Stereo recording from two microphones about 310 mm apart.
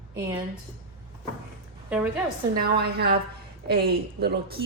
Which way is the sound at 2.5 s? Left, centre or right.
Right.